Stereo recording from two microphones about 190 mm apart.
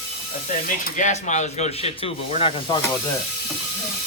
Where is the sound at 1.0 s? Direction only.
40° left (ahead or behind).